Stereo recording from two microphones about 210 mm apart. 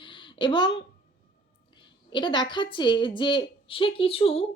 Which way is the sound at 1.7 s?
20° left (ahead or behind).